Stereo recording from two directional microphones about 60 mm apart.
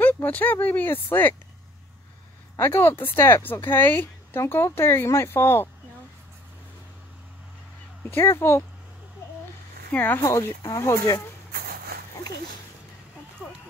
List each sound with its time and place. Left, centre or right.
0.0 s speech: left
2.6 s speech: left
4.4 s speech: left
8.1 s speech: left
9.9 s speech: left
10.2 s speech: left